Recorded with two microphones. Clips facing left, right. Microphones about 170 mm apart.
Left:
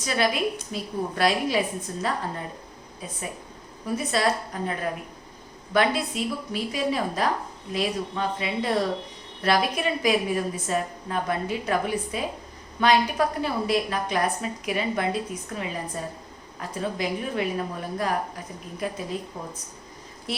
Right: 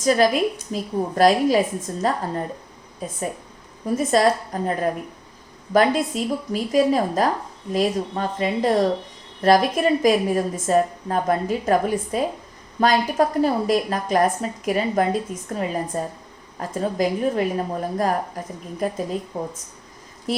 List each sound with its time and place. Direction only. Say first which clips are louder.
0.0 s a woman's voice: right 7 dB; 45° right (ahead or behind)